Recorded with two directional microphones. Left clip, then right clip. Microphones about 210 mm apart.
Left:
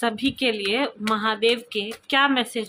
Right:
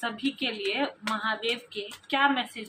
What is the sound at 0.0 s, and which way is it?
A woman's voice, 55° left (ahead or behind).